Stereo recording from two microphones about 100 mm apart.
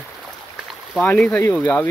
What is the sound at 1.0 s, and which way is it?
Speech, 15° left (ahead or behind).